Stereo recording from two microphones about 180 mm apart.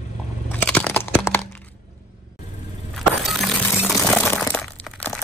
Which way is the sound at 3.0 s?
Centre (ahead or behind).